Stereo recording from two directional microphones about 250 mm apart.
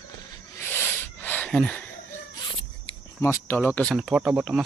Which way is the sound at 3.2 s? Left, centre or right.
Centre.